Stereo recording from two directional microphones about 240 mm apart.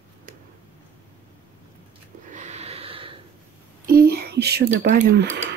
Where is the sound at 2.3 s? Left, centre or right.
Right.